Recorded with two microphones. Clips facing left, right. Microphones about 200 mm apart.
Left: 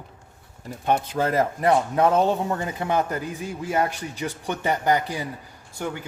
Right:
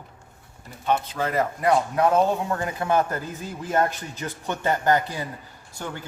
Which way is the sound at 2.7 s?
20° left (ahead or behind).